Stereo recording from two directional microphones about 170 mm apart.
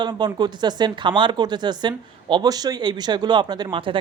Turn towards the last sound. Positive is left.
turn(degrees=-30)  # may be behind; listen again after turning